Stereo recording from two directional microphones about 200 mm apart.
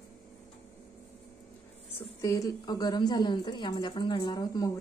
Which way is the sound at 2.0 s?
15° left (ahead or behind).